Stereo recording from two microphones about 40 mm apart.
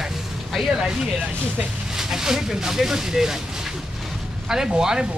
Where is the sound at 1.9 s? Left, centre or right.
Centre.